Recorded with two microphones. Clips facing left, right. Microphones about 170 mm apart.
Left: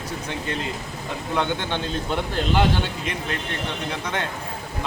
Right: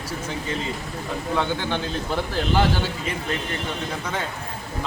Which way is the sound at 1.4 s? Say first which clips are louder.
Left 1 dB; 20° left (ahead or behind).